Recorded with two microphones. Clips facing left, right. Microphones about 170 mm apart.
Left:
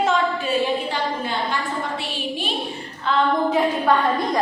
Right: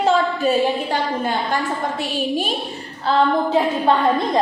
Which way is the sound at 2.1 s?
45° right (ahead or behind).